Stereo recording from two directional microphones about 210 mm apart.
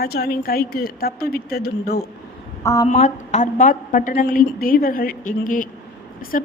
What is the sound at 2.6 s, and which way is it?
Speech, 15° left (ahead or behind).